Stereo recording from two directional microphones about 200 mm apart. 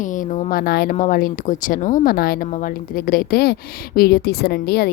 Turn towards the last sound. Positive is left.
turn(degrees=55)  # may be behind; listen again after turning